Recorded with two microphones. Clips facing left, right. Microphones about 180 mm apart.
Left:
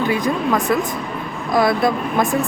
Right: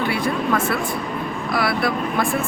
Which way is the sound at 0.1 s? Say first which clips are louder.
Left 3 dB; 15° left (ahead or behind).